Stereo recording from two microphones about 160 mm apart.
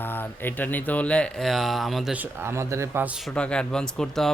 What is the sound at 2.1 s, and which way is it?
Speech, 15° right (ahead or behind).